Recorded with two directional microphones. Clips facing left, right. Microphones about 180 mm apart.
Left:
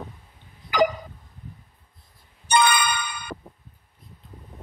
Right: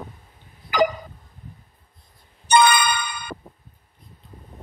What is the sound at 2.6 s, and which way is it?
Music, 60° right (ahead or behind).